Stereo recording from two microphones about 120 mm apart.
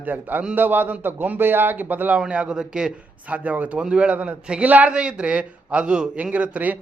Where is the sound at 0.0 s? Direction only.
15° right (ahead or behind).